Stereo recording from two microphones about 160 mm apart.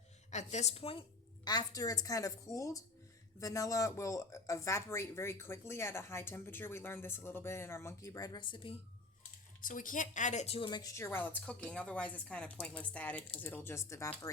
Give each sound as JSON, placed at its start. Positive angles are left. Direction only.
{"t": 0.3, "sound": "a woman's voice", "side_deg": 45}
{"t": 1.5, "sound": "a woman's voice", "side_deg": 25}
{"t": 9.6, "sound": "speech", "side_deg": 55}